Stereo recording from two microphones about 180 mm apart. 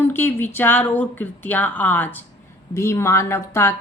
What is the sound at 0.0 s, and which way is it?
A woman's voice, 10° left (ahead or behind).